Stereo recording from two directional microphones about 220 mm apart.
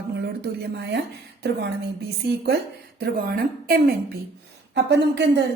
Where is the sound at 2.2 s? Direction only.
50° right (ahead or behind).